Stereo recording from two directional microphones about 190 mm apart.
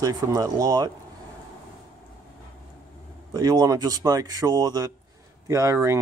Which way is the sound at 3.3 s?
20° right (ahead or behind).